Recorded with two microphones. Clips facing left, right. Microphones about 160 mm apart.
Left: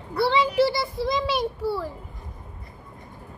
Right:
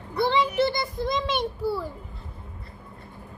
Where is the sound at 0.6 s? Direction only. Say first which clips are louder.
Left 2 dB; 5° left (ahead or behind).